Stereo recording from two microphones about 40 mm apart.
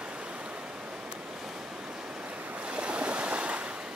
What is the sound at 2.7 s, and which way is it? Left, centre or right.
Stream, right.